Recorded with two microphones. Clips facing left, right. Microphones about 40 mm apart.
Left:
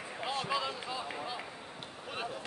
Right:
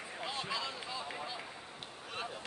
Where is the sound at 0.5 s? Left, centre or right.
Centre.